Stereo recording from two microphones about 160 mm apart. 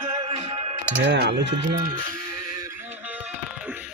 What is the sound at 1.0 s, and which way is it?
Speech, 90° right.